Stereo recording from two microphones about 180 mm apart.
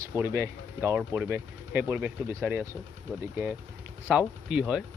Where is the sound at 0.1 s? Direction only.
15° right (ahead or behind).